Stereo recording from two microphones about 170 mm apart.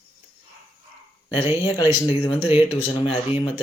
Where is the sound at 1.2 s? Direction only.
30° left (ahead or behind).